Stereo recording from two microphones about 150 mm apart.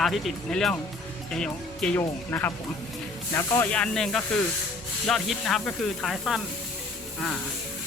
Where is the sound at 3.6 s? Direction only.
5° left (ahead or behind).